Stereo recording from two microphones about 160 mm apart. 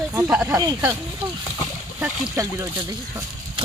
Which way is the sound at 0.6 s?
25° right (ahead or behind).